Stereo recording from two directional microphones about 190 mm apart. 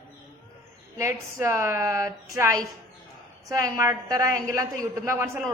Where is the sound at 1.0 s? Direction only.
15° right (ahead or behind).